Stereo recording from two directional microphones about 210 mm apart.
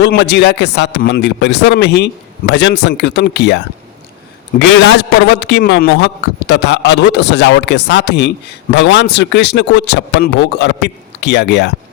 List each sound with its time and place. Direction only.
0.0 s a man's voice: 55° left (ahead or behind)
4.7 s speech: 55° left (ahead or behind)